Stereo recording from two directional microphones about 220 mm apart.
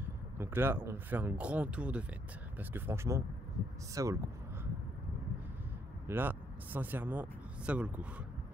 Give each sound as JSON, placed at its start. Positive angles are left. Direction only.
{"t": 0.0, "sound": "speech", "side_deg": -10}
{"t": 6.0, "sound": "speech", "side_deg": -10}